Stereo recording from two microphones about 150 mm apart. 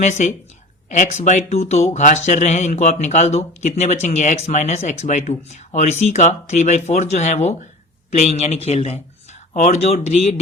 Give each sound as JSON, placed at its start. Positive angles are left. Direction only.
{"t": 0.0, "sound": "speech", "side_deg": 55}